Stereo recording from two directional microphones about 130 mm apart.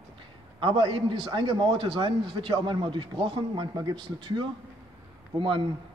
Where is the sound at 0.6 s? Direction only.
40° right (ahead or behind).